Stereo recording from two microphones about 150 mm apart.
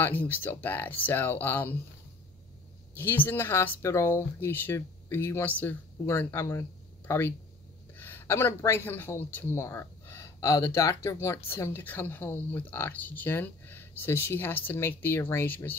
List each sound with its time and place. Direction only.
0.0 s speech: 10° left (ahead or behind)
3.0 s speech: 15° left (ahead or behind)